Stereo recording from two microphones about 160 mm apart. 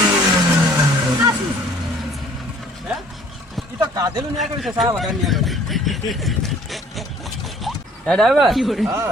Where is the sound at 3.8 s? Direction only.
25° right (ahead or behind).